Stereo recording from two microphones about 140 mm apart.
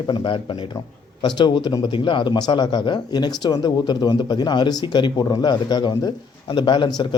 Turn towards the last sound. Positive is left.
turn(degrees=35)  # may be behind; listen again after turning